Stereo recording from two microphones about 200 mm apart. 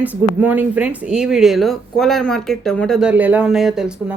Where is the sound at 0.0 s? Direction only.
10° right (ahead or behind).